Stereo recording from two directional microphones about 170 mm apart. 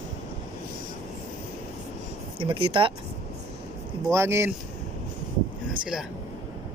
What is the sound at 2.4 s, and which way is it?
Speech, 30° right (ahead or behind).